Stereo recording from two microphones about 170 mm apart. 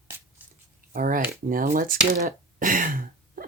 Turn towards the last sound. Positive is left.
turn(degrees=-55)  # may be behind; listen again after turning